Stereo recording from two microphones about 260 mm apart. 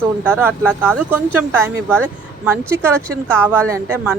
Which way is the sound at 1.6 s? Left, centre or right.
Centre.